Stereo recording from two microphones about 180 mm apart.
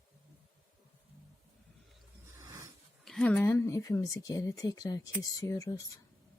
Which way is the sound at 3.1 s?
5° left (ahead or behind).